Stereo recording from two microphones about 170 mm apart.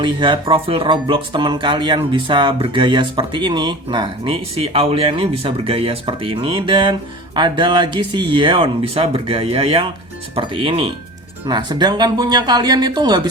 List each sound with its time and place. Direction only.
0.0 s speech: 25° right (ahead or behind)